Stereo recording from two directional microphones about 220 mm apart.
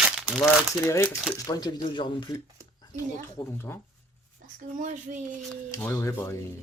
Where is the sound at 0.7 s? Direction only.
15° left (ahead or behind).